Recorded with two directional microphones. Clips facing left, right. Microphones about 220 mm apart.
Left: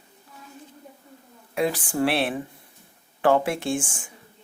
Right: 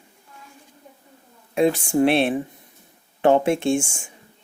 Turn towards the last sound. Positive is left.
turn(degrees=-25)  # may be behind; listen again after turning